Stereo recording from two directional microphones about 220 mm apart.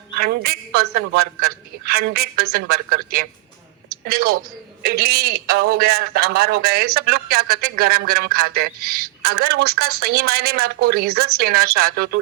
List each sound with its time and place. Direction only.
0.2 s a man's voice: 45° right (ahead or behind)